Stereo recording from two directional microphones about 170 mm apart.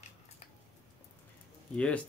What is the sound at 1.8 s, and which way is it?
Speech, 5° left (ahead or behind).